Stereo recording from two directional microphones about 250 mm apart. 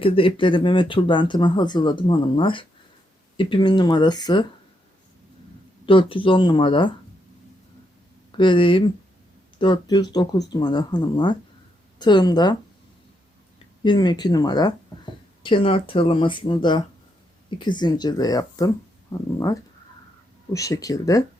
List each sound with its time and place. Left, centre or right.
0.0 s speech: left
5.8 s speech: left
8.4 s speech: centre
13.8 s speech: centre
20.5 s speech: centre